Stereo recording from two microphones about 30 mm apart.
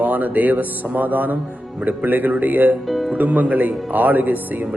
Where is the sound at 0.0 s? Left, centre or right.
Right.